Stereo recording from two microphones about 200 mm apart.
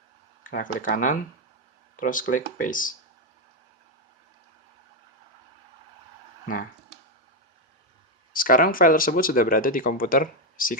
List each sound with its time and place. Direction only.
0.5 s speech: 40° left (ahead or behind)
8.3 s speech: 45° left (ahead or behind)